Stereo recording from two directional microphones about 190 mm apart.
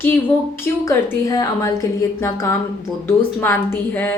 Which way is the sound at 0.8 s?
15° left (ahead or behind).